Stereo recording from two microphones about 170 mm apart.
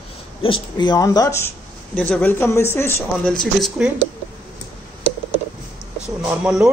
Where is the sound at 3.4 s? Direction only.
Centre (ahead or behind).